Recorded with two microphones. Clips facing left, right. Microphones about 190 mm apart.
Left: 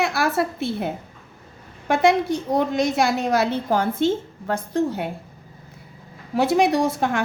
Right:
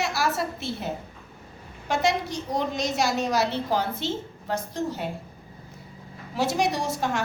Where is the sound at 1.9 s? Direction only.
55° left (ahead or behind).